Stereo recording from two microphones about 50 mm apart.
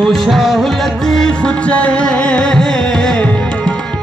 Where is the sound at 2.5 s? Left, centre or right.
Centre.